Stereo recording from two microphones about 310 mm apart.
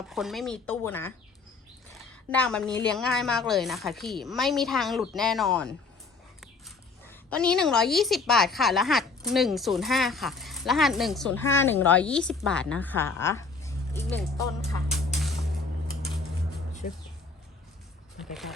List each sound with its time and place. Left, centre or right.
0.1 s a woman's voice: centre
2.3 s a woman's voice: centre
16.8 s speech: left
18.2 s a sound: centre